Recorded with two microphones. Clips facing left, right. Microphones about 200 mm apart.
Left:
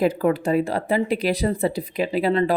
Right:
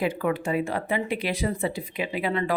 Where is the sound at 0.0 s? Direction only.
40° left (ahead or behind).